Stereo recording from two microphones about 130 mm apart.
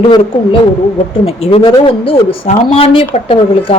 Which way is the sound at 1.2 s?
50° left (ahead or behind).